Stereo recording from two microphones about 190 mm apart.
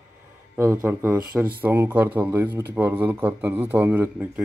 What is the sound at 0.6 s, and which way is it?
Speech, 15° right (ahead or behind).